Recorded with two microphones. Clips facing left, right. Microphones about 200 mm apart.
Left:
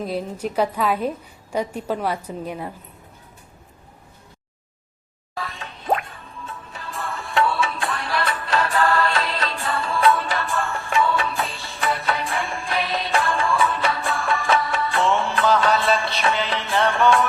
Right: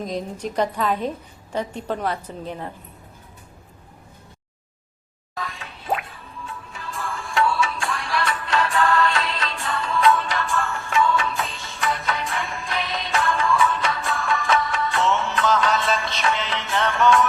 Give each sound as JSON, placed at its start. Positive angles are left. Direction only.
{"t": 0.0, "sound": "a woman's voice", "side_deg": 5}
{"t": 5.5, "sound": "music", "side_deg": 40}
{"t": 7.9, "sound": "music", "side_deg": 0}
{"t": 8.3, "sound": "music", "side_deg": 35}